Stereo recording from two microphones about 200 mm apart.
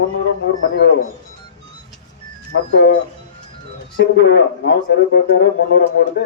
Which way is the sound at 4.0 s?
60° left (ahead or behind).